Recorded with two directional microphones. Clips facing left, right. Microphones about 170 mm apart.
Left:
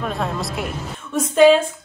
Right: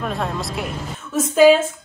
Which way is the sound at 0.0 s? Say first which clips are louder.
Even; centre (ahead or behind).